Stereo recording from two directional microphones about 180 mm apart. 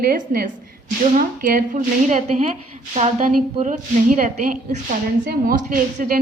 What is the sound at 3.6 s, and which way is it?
A woman's voice, 45° right (ahead or behind).